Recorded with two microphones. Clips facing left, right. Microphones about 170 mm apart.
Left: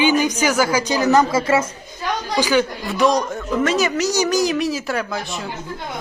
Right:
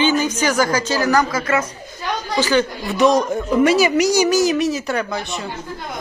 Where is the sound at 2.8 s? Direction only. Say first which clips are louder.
Right 2 dB; centre (ahead or behind).